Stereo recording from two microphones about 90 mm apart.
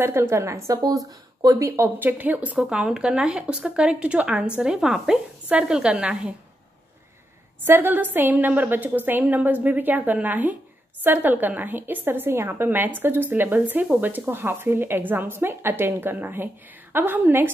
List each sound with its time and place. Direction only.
0.0 s a woman's voice: 30° right (ahead or behind)
2.0 s speech: 20° right (ahead or behind)
7.6 s a woman's voice: 25° right (ahead or behind)